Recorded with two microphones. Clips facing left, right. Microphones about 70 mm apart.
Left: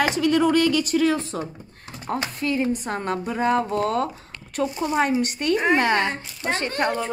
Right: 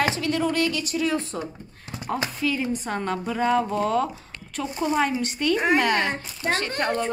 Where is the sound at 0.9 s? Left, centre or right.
Left.